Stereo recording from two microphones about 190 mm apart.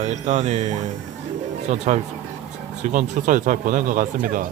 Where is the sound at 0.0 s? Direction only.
40° right (ahead or behind).